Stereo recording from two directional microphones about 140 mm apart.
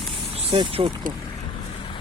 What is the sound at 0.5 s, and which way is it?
Speech, 40° right (ahead or behind).